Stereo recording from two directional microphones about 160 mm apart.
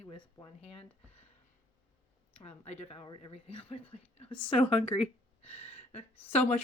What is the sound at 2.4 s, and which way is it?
A woman's voice, 40° left (ahead or behind).